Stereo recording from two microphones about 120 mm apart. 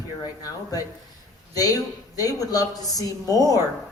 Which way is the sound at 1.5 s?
30° left (ahead or behind).